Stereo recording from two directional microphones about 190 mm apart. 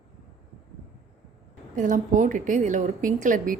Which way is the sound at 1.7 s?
45° right (ahead or behind).